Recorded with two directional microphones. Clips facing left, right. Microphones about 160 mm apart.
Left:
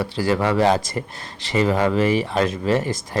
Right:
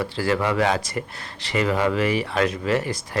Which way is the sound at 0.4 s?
35° left (ahead or behind).